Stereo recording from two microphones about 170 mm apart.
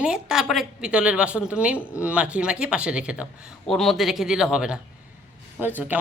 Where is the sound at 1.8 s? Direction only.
15° left (ahead or behind).